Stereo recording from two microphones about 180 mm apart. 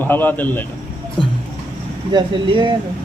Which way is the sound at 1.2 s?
30° left (ahead or behind).